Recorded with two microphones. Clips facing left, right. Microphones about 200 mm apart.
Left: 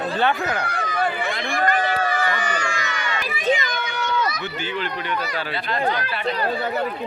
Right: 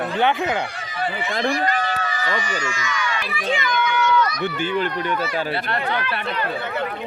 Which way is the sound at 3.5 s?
40° left (ahead or behind).